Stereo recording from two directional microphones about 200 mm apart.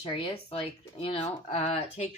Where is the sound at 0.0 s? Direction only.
25° left (ahead or behind).